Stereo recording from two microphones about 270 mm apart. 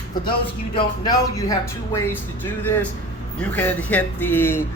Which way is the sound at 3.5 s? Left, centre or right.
Centre.